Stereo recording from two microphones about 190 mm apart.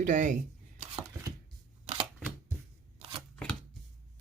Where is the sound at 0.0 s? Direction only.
40° right (ahead or behind).